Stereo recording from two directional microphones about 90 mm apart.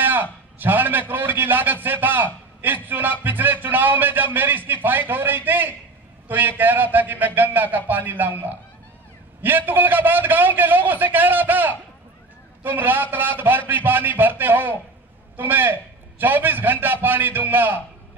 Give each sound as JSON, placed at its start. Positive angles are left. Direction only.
{"t": 0.0, "sound": "a man's voice", "side_deg": -20}